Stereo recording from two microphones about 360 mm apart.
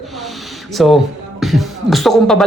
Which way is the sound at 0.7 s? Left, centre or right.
Centre.